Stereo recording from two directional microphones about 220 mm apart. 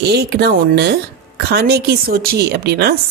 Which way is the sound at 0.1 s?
45° right (ahead or behind).